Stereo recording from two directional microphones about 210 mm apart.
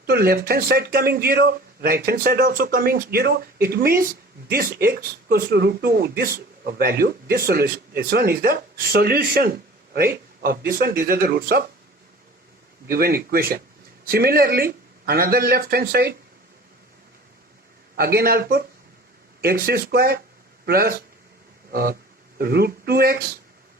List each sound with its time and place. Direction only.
0.0 s speech: 45° right (ahead or behind)
12.9 s speech: 45° right (ahead or behind)
17.9 s speech: 45° right (ahead or behind)
21.7 s a sound: 45° right (ahead or behind)
22.4 s speech: 50° right (ahead or behind)